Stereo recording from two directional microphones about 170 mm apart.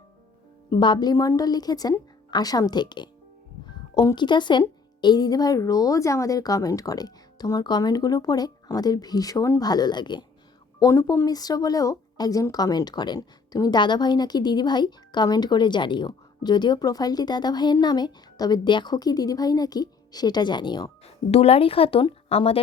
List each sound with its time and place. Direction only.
0.7 s speech: 25° left (ahead or behind)